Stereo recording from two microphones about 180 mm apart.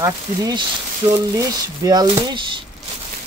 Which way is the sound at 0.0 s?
20° right (ahead or behind).